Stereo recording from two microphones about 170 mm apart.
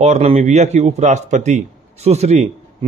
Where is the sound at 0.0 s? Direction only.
40° right (ahead or behind).